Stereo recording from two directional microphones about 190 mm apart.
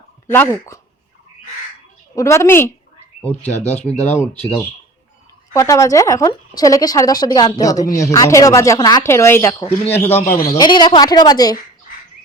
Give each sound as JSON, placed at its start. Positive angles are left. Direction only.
{"t": 0.3, "sound": "speech", "side_deg": 10}
{"t": 2.1, "sound": "speech", "side_deg": 15}
{"t": 3.6, "sound": "speech", "side_deg": 35}
{"t": 3.9, "sound": "speech", "side_deg": 10}
{"t": 5.5, "sound": "a woman's voice", "side_deg": 15}
{"t": 10.2, "sound": "a man's voice", "side_deg": 50}
{"t": 10.5, "sound": "a woman's voice", "side_deg": 20}